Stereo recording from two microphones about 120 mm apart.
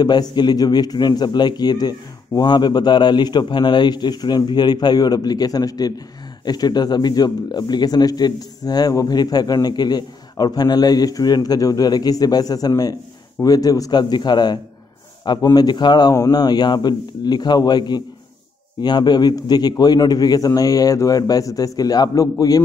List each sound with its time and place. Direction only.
0.0 s speech: 35° left (ahead or behind)